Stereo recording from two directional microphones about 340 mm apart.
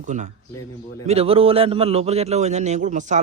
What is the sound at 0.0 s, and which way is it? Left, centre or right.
A man's voice, right.